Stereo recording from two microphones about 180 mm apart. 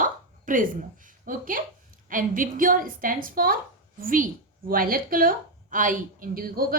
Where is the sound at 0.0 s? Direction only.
50° right (ahead or behind).